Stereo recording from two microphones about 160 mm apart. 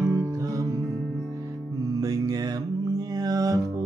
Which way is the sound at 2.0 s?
25° right (ahead or behind).